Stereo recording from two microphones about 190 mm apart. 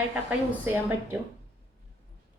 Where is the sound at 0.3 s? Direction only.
10° right (ahead or behind).